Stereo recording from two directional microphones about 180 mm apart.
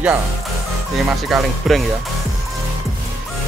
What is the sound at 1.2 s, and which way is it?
Speech, centre (ahead or behind).